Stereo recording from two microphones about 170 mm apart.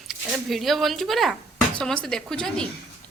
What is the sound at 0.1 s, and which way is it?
Speech, centre (ahead or behind).